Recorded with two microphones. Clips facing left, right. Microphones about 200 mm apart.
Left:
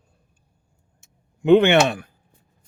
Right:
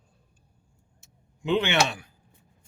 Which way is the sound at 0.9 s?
55° left (ahead or behind).